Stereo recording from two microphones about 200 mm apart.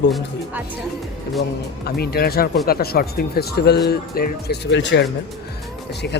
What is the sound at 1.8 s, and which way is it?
Speech, 50° left (ahead or behind).